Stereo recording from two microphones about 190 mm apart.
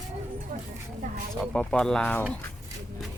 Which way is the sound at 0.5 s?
50° right (ahead or behind).